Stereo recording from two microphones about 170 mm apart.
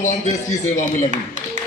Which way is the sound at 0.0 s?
45° left (ahead or behind).